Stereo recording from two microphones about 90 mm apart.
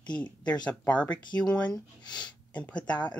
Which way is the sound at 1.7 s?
55° left (ahead or behind).